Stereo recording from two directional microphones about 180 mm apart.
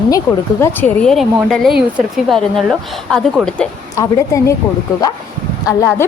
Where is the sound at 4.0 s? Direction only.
15° left (ahead or behind).